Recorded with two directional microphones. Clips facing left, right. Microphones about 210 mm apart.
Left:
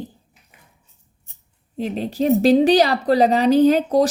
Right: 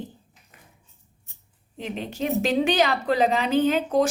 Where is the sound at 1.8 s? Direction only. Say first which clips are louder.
Left 7 dB; 35° left (ahead or behind).